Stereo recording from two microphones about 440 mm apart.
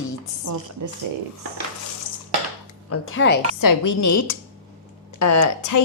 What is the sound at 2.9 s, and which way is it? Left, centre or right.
Speech, left.